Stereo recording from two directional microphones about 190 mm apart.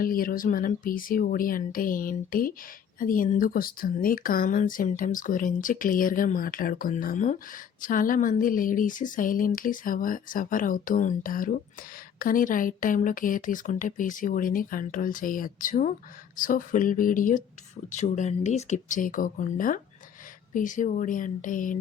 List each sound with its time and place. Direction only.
0.0 s speech: 50° left (ahead or behind)